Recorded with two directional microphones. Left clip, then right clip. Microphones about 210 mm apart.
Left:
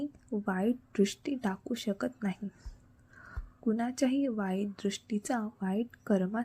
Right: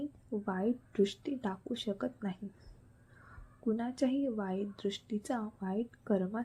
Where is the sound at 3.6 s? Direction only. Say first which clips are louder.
Left 3 dB; 20° left (ahead or behind).